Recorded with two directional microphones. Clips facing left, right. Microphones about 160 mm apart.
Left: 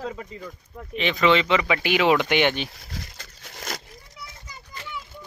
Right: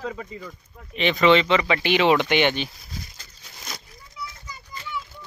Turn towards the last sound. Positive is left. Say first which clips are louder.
# left 5 dB
turn(degrees=75)  # may be behind; listen again after turning